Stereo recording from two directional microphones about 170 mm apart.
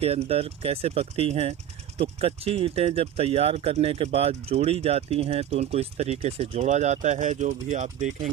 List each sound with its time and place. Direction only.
0.0 s speech: 35° right (ahead or behind)